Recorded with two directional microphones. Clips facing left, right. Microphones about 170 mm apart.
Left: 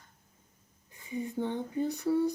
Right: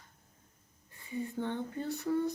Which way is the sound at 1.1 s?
15° left (ahead or behind).